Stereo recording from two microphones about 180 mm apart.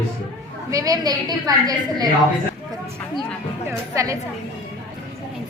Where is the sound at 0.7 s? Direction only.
20° right (ahead or behind).